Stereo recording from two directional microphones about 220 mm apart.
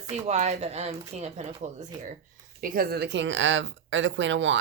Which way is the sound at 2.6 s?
40° right (ahead or behind).